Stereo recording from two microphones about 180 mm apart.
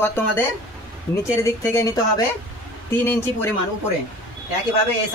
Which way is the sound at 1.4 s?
15° left (ahead or behind).